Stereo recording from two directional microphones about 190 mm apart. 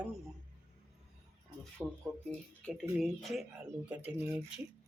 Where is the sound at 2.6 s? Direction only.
Centre (ahead or behind).